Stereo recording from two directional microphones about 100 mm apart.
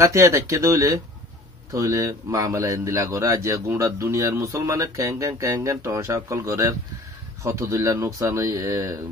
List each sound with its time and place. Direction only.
0.0 s a man's voice: 30° right (ahead or behind)